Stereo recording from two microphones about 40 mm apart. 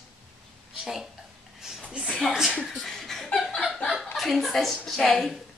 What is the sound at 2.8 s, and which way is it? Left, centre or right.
Laughter, centre.